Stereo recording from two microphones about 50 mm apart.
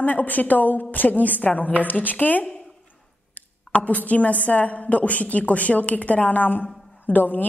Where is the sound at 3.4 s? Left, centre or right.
Left.